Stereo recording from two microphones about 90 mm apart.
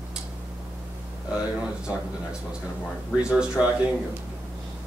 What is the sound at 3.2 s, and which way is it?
Speech, 10° right (ahead or behind).